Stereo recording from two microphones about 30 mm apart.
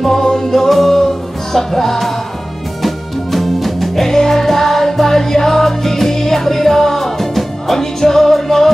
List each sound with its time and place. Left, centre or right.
0.2 s music: left
0.5 s music: centre
4.0 s music: centre